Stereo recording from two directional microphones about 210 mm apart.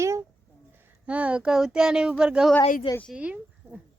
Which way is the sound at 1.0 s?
5° right (ahead or behind).